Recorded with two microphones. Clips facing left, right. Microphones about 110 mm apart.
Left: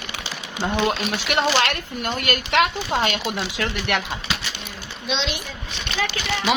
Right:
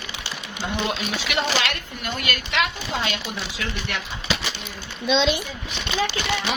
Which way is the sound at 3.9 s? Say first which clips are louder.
Left 7 dB; 70° left (ahead or behind).